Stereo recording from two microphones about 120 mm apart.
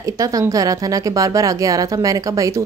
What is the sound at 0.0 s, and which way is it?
A woman's voice, 30° right (ahead or behind).